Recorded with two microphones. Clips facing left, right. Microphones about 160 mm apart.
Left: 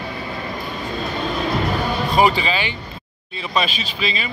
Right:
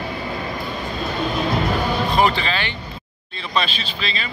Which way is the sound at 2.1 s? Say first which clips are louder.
Left 4 dB; 10° left (ahead or behind).